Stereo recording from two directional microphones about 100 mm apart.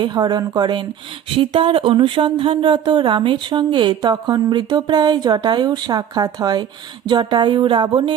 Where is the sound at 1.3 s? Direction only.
60° right (ahead or behind).